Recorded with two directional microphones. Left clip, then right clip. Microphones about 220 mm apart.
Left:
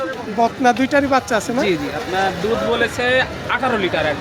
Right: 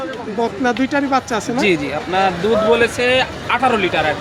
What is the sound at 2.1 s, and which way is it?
Speech, 40° right (ahead or behind).